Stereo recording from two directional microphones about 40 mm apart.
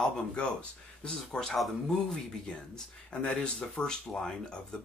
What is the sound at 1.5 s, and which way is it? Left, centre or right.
Speech, centre.